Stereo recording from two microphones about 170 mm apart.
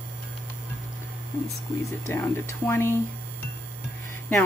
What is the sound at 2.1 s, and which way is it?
Speech, 15° left (ahead or behind).